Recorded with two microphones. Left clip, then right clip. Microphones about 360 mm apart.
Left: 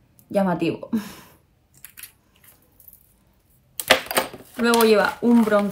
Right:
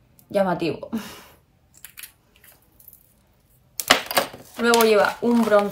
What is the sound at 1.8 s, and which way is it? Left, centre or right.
Scissors, centre.